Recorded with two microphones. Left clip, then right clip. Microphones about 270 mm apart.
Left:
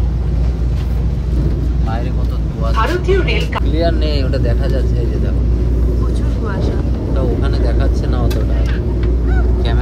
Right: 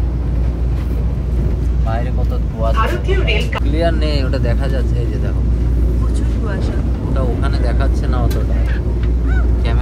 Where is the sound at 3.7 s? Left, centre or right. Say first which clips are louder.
Even; right.